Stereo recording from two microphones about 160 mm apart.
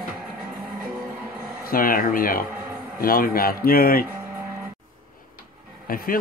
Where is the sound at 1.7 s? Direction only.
65° left (ahead or behind).